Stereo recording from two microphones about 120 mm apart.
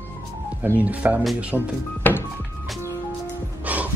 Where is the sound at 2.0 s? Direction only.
15° left (ahead or behind).